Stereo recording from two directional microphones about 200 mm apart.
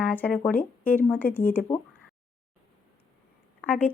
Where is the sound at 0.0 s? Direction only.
5° left (ahead or behind).